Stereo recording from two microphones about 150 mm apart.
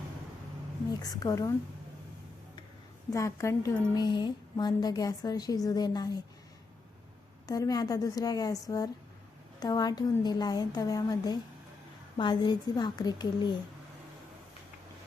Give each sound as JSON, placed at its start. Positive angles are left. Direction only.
{"t": 1.1, "sound": "speech", "side_deg": 25}
{"t": 3.1, "sound": "speech", "side_deg": 20}
{"t": 7.4, "sound": "speech", "side_deg": 25}